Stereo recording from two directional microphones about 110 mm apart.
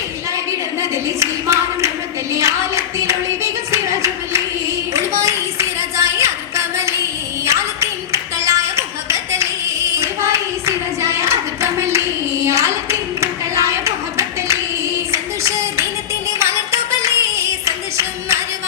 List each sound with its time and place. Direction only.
0.8 s a sound: 25° right (ahead or behind)
2.3 s singing: 25° right (ahead or behind)
4.9 s clapping: 25° right (ahead or behind)
7.4 s a sound: 25° right (ahead or behind)
10.0 s hands: 25° right (ahead or behind)
15.1 s music: 25° right (ahead or behind)